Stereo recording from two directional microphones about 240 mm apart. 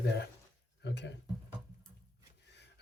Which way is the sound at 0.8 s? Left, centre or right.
Left.